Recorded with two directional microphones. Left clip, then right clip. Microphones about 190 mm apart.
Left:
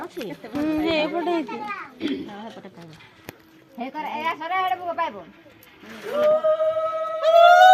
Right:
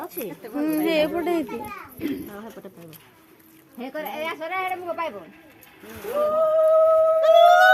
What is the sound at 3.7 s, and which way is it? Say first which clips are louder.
Speech: left 1 dB; 30° left (ahead or behind).